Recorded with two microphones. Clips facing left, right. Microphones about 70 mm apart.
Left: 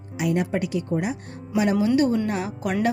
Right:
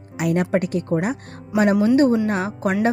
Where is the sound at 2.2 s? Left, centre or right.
Right.